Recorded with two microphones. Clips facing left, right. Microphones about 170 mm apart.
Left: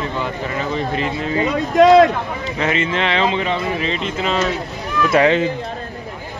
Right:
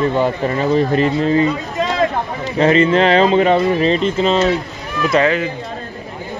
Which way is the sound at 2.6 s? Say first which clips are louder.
Right 9 dB; 35° right (ahead or behind).